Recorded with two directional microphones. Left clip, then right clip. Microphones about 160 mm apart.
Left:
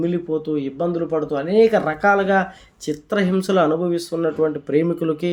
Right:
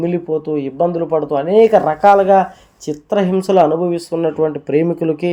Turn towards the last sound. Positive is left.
turn(degrees=-10)  # may be behind; listen again after turning